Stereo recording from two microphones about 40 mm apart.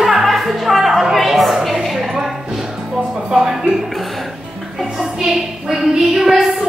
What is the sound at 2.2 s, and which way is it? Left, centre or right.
Music, centre.